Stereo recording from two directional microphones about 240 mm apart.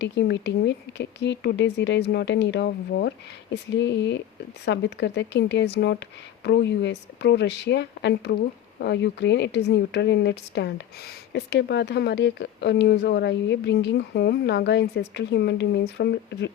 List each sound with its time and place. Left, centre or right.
0.0 s a woman's voice: left